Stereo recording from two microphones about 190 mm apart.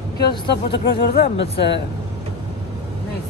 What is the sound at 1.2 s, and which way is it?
Speech, 30° left (ahead or behind).